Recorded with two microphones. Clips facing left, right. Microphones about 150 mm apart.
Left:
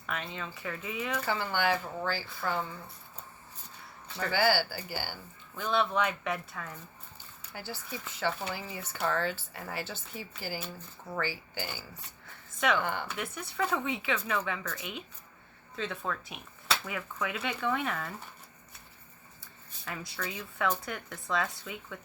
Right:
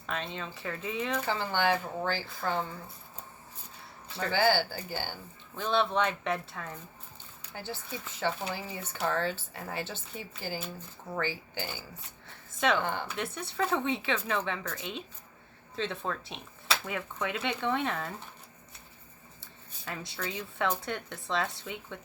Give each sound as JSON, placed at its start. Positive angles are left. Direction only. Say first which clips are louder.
{"t": 0.0, "sound": "speech", "louder": "right 2 dB", "side_deg": -25}
{"t": 4.2, "sound": "speech", "louder": "right 1 dB", "side_deg": -20}
{"t": 19.8, "sound": "speech", "louder": "right 1 dB", "side_deg": -25}